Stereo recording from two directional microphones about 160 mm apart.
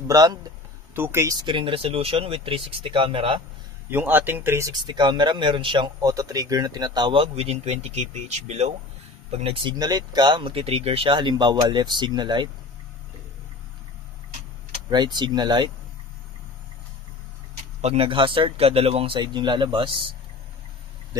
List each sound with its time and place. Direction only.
0.1 s speech: 25° right (ahead or behind)
3.9 s speech: 10° right (ahead or behind); by 12.4 s 30° right (ahead or behind)
14.9 s speech: 25° right (ahead or behind)
17.8 s speech: 35° right (ahead or behind)